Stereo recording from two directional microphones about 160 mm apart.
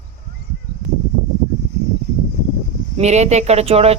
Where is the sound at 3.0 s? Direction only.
45° right (ahead or behind).